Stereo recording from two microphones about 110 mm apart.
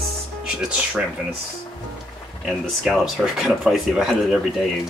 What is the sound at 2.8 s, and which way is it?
Speech, centre (ahead or behind).